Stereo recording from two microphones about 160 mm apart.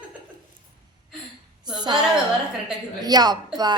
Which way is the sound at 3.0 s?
25° right (ahead or behind).